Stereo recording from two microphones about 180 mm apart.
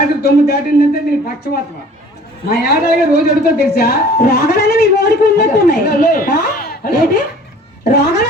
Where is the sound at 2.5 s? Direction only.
60° left (ahead or behind).